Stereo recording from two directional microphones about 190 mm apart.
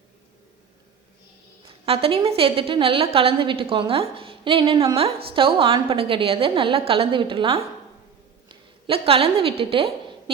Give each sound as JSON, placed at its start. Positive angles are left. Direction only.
{"t": 1.6, "sound": "a woman's voice", "side_deg": -30}